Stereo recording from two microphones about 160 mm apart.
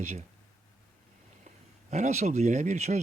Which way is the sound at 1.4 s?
45° right (ahead or behind).